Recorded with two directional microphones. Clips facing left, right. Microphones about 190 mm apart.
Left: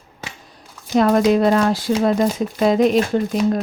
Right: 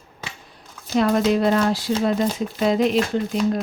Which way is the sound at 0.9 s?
45° left (ahead or behind).